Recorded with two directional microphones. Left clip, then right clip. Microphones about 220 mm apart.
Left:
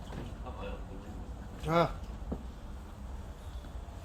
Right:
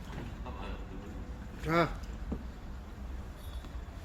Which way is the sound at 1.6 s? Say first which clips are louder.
Left 1 dB; 35° left (ahead or behind).